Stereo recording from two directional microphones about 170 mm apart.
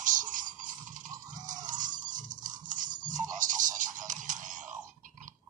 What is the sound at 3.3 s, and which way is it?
Music, 50° right (ahead or behind).